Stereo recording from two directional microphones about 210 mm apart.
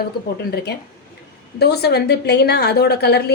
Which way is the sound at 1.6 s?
50° left (ahead or behind).